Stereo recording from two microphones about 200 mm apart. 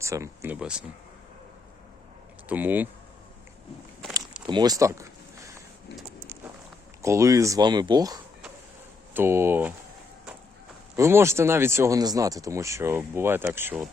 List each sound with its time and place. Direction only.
0.0 s speech: 15° right (ahead or behind)
2.5 s speech: 10° right (ahead or behind)
4.4 s speech: 20° right (ahead or behind)
7.0 s speech: 15° right (ahead or behind)
10.9 s speech: 15° right (ahead or behind)